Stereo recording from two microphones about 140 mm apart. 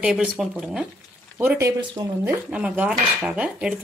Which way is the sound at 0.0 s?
5° right (ahead or behind).